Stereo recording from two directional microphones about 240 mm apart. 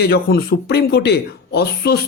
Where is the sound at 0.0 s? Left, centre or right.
Left.